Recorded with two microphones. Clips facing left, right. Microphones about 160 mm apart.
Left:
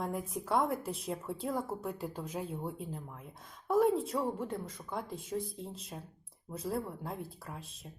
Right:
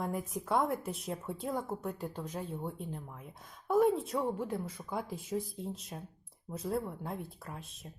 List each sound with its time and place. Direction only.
0.0 s a woman's voice: centre (ahead or behind)